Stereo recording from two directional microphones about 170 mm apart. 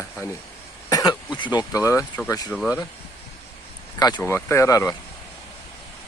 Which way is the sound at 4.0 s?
25° left (ahead or behind).